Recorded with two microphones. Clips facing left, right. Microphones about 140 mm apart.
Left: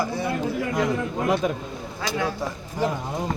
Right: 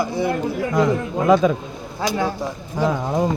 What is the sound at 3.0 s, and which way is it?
Speech, 90° right.